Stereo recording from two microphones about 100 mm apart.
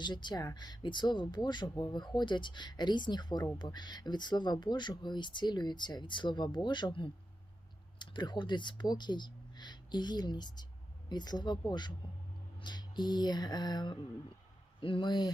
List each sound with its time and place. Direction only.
0.0 s speech: 50° left (ahead or behind)
14.8 s speech: 60° left (ahead or behind)